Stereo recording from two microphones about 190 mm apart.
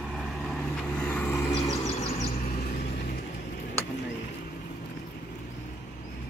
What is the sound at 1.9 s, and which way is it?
Vehicle, 40° left (ahead or behind).